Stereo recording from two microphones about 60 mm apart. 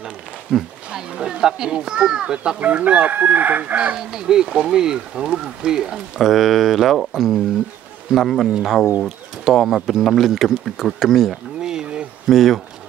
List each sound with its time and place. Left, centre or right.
0.0 s a sound: centre
0.8 s speech: centre
2.6 s chicken: right; by 7.4 s centre
8.1 s speech: centre
11.6 s a sound: centre
12.3 s speech: centre